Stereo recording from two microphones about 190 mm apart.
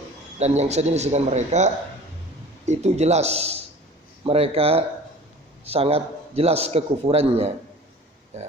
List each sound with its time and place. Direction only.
0.3 s a man's voice: 35° right (ahead or behind)